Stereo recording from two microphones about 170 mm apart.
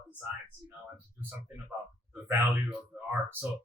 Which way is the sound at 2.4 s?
10° right (ahead or behind).